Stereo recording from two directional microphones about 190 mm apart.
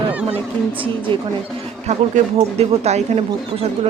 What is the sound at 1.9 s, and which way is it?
Speech, 35° right (ahead or behind).